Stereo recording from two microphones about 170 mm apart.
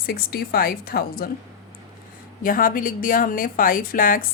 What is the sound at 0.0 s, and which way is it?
A woman's voice, 60° left (ahead or behind).